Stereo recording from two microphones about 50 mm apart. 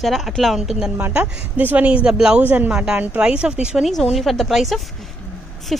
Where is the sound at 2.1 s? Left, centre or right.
Centre.